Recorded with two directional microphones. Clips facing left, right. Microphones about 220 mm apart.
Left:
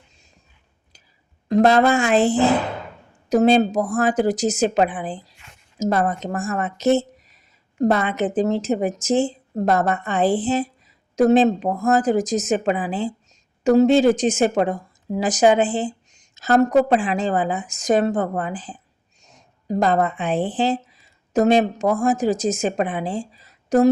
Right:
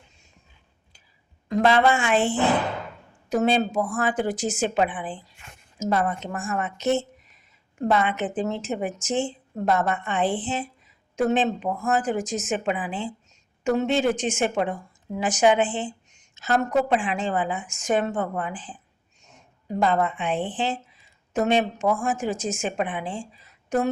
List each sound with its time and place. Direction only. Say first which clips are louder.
1.5 s a woman's voice: left 4 dB; 40° left (ahead or behind)